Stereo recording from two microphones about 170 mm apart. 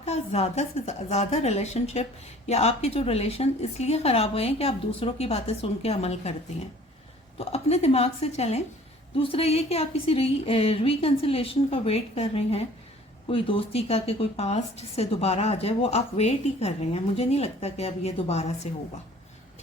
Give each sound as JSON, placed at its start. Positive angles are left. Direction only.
{"t": 0.0, "sound": "a woman's voice", "side_deg": 40}
{"t": 7.3, "sound": "a woman's voice", "side_deg": 40}